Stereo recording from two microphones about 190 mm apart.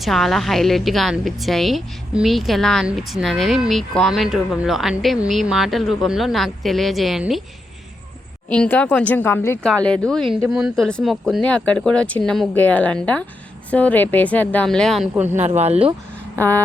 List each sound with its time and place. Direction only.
0.0 s a woman's voice: centre (ahead or behind)
8.4 s a woman's voice: 5° left (ahead or behind)
15.1 s speech: 10° right (ahead or behind)
15.4 s speech: 35° right (ahead or behind)
16.4 s speech: 10° left (ahead or behind)